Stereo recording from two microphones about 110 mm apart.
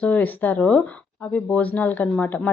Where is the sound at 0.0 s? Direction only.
15° left (ahead or behind).